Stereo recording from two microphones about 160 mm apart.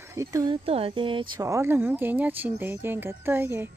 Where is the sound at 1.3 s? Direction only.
20° right (ahead or behind).